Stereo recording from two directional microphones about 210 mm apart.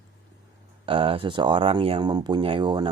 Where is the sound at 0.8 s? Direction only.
25° right (ahead or behind).